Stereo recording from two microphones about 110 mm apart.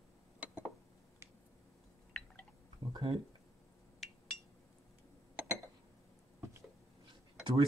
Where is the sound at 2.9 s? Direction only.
55° right (ahead or behind).